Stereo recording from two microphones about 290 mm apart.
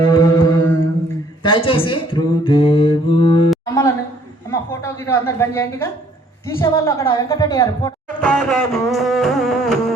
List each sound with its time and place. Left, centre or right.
0.1 s mantra: centre
3.5 s a sound: centre
4.5 s a woman's voice: centre